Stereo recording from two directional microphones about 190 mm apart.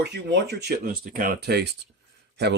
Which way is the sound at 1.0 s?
50° right (ahead or behind).